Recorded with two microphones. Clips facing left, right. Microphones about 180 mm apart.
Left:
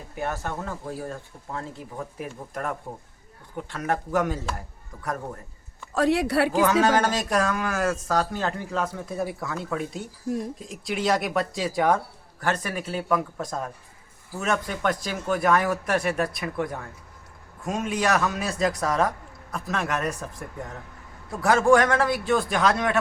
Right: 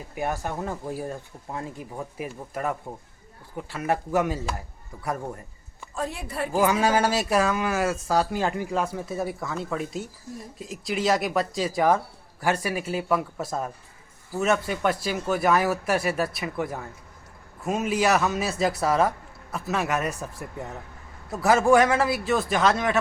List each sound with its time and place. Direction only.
0.1 s speech: 15° right (ahead or behind)
5.9 s speech: 80° left
6.5 s speech: 10° right (ahead or behind)
21.4 s speech: 5° right (ahead or behind)